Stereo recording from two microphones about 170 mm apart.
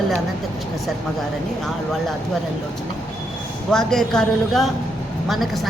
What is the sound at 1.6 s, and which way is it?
Speech, centre (ahead or behind).